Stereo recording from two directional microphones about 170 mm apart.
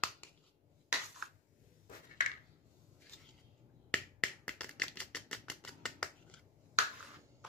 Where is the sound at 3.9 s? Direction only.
10° left (ahead or behind).